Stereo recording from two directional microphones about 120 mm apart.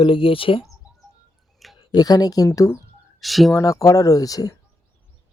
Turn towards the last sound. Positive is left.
turn(degrees=30)  # may be behind; listen again after turning